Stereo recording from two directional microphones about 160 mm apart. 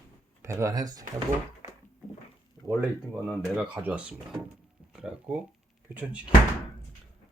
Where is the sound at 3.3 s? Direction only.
Centre (ahead or behind).